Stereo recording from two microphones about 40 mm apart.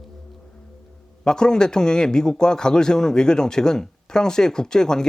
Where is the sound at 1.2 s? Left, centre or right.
Centre.